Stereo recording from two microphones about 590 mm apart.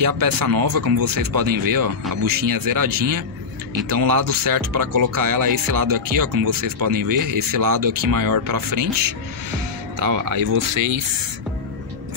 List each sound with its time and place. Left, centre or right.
0.0 s speech: right